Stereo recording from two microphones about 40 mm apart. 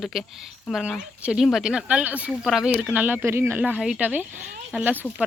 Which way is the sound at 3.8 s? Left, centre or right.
Centre.